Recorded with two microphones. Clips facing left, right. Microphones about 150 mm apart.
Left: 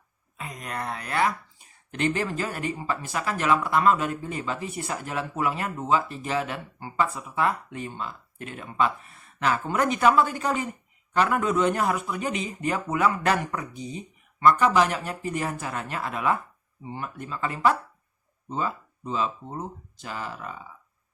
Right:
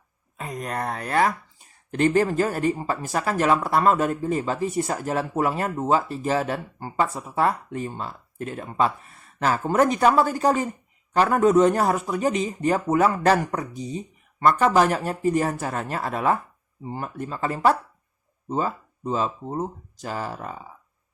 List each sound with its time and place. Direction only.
0.3 s speech: 40° right (ahead or behind)